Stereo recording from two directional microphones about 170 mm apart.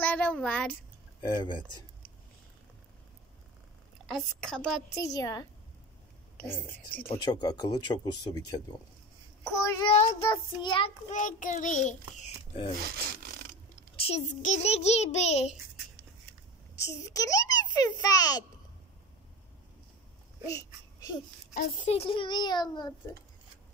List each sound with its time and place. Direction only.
0.0 s a child's voice: 10° left (ahead or behind)
1.2 s speech: 25° left (ahead or behind)
4.1 s a woman's voice: 5° left (ahead or behind)
4.9 s a woman's voice: 20° left (ahead or behind)
7.1 s speech: 25° left (ahead or behind)
9.9 s speech: 35° left (ahead or behind)
11.1 s a child's voice: 50° left (ahead or behind)
13.9 s a child's voice: 35° left (ahead or behind)
16.7 s a child's voice: 20° left (ahead or behind)
20.5 s speech: 20° left (ahead or behind)
21.5 s speech: 45° left (ahead or behind); by 22.9 s 25° left (ahead or behind)